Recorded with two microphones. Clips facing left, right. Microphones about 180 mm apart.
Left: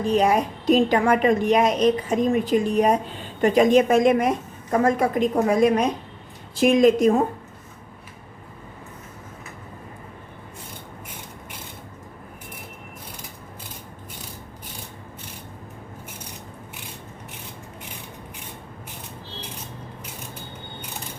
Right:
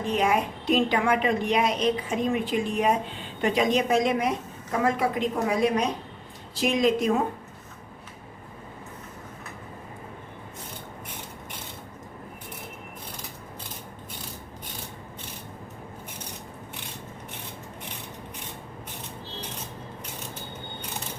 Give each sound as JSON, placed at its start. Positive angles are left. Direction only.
{"t": 0.0, "sound": "a woman's voice", "side_deg": 35}